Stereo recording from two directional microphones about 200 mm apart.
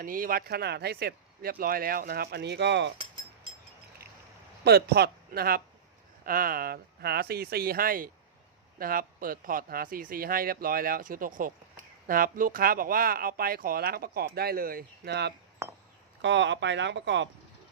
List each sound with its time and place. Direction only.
0.0 s speech: 45° right (ahead or behind); by 2.9 s 60° right (ahead or behind)
4.6 s speech: 55° right (ahead or behind)